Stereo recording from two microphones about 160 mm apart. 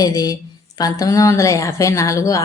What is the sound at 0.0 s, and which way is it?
A woman's voice, 25° left (ahead or behind).